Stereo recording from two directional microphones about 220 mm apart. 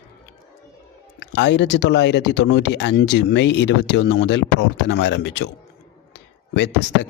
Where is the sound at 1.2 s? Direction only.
50° left (ahead or behind).